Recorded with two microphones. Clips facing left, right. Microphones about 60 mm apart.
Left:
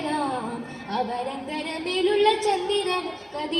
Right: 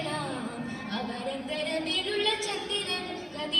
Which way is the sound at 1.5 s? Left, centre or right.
Left.